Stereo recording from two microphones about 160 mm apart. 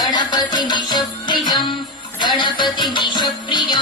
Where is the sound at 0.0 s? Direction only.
25° left (ahead or behind).